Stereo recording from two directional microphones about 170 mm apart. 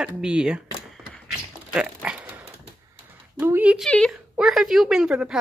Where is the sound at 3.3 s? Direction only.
10° right (ahead or behind).